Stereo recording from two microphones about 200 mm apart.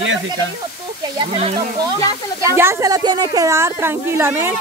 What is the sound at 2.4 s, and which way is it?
Speech, 15° right (ahead or behind).